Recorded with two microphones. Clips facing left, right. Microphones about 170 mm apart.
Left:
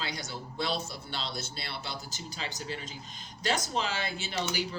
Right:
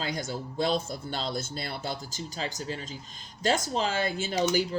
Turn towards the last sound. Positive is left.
turn(degrees=-45)  # may be behind; listen again after turning